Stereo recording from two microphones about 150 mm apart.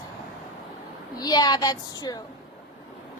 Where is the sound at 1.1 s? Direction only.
25° left (ahead or behind).